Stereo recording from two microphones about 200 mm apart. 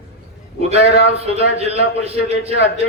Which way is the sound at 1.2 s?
30° right (ahead or behind).